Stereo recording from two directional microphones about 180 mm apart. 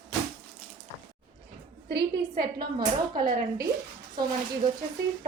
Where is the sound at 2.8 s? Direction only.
55° right (ahead or behind).